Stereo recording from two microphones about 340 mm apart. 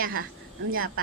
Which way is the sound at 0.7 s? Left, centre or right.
Right.